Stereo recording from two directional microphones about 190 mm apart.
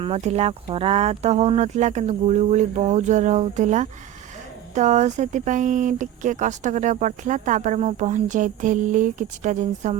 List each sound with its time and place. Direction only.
0.0 s speech: 35° right (ahead or behind)